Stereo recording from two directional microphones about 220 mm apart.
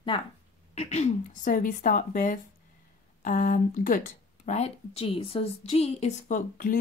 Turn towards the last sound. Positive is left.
turn(degrees=40)  # may be behind; listen again after turning